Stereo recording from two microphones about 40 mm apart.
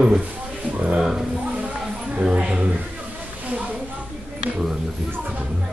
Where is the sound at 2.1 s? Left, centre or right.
Right.